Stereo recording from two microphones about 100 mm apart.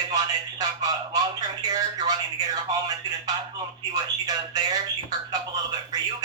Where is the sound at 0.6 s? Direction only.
40° right (ahead or behind).